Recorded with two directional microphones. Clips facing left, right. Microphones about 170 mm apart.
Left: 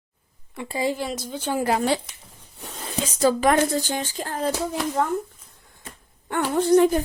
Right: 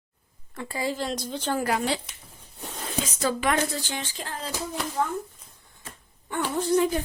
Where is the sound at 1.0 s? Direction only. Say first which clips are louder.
Left 1 dB; 5° left (ahead or behind).